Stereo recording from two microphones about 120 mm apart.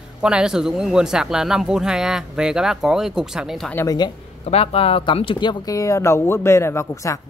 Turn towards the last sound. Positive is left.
turn(degrees=25)  # may be behind; listen again after turning